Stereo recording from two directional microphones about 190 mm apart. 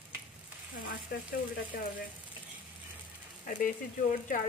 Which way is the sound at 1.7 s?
55° left (ahead or behind).